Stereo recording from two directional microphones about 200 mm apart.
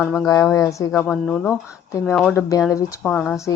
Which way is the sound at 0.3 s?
15° left (ahead or behind).